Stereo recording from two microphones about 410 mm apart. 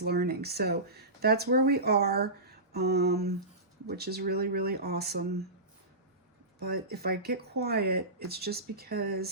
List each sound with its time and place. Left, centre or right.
0.0 s speech: right
6.9 s speech: right